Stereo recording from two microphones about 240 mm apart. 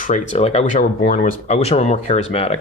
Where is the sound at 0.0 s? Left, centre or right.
Left.